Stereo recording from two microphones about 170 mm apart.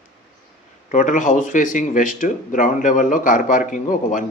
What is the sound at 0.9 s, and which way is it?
Speech, 45° left (ahead or behind).